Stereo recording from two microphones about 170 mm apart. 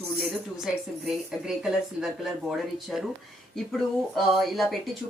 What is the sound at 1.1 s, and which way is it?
Speech, 5° right (ahead or behind).